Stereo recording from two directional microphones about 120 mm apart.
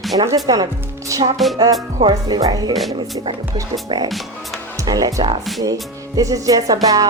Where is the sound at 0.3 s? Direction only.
30° right (ahead or behind).